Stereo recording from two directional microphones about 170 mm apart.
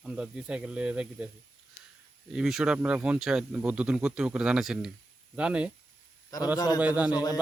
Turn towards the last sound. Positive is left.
turn(degrees=25)  # may be behind; listen again after turning